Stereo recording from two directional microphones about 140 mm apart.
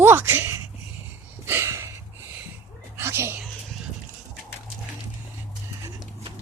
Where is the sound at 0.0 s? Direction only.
15° right (ahead or behind).